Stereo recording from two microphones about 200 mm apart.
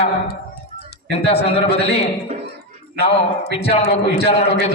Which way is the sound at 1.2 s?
30° left (ahead or behind).